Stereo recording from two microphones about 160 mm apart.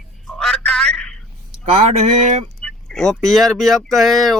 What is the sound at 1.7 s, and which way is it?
Speech, 40° right (ahead or behind).